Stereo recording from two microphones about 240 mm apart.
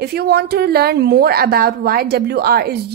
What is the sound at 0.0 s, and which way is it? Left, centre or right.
A woman's voice, right.